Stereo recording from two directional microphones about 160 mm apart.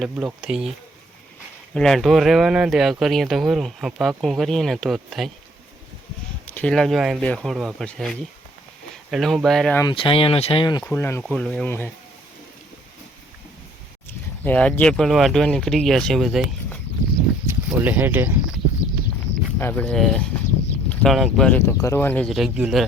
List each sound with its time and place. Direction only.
0.0 s speech: 5° right (ahead or behind)
1.7 s speech: 5° left (ahead or behind)
6.5 s speech: 5° left (ahead or behind)
9.9 s speech: 35° left (ahead or behind)
10.8 s speech: 15° left (ahead or behind)
11.2 s speech: 5° left (ahead or behind)
14.4 s speech: 10° left (ahead or behind)
17.4 s a sound: 15° right (ahead or behind)
19.5 s speech: 10° left (ahead or behind)
21.7 s speech: 15° left (ahead or behind)
22.3 s speech: centre (ahead or behind)